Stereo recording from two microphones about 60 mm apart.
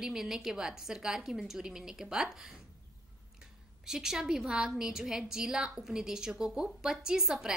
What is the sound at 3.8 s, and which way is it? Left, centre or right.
A woman's voice, centre.